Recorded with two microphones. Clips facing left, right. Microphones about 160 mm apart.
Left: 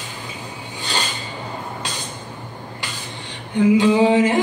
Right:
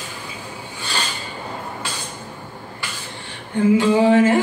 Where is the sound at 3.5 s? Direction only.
15° left (ahead or behind).